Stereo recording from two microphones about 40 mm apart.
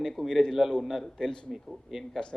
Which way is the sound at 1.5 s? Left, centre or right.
Centre.